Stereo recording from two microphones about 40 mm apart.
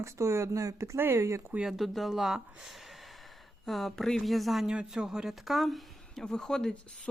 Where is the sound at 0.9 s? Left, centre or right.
Right.